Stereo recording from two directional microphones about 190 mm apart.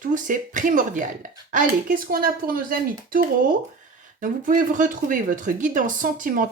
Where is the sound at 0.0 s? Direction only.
45° right (ahead or behind).